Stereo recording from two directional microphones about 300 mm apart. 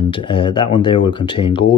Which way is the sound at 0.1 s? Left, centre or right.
Centre.